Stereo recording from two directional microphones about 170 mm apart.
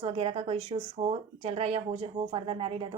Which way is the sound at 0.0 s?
35° right (ahead or behind).